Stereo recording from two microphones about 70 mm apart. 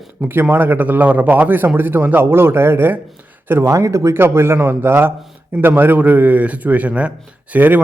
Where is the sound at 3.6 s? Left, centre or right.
Right.